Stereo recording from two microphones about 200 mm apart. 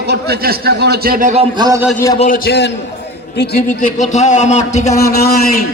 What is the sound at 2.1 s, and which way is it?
A man's voice, 40° left (ahead or behind).